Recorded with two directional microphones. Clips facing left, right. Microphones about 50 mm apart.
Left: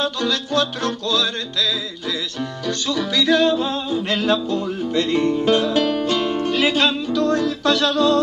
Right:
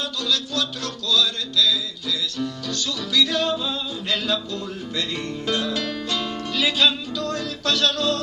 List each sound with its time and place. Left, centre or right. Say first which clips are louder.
0.0 s music: left 4 dB; left
2.9 s music: left 5 dB; left